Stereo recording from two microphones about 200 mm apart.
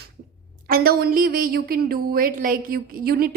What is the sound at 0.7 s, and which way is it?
A woman's voice, 50° right (ahead or behind).